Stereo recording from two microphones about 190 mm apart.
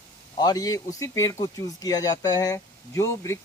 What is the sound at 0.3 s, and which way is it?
Speech, 20° left (ahead or behind).